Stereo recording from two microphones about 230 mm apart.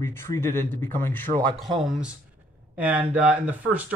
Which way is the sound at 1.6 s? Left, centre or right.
Centre.